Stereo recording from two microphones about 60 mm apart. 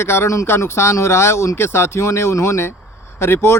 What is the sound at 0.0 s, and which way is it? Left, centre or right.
Speech, left.